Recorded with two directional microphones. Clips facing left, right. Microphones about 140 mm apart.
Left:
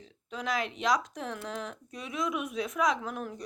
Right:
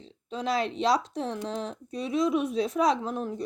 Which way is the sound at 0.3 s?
30° right (ahead or behind).